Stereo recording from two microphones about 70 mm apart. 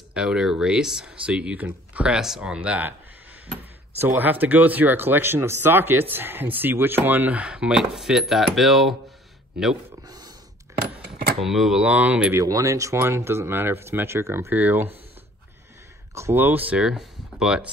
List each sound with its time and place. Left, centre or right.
0.1 s speech: centre
2.1 s speech: centre
4.0 s speech: right; by 8.9 s centre
10.0 s dog: right
11.4 s speech: centre
11.8 s speech: right
12.4 s speech: right
14.5 s speech: right
16.2 s speech: right
16.4 s speech: right
16.9 s a sound: centre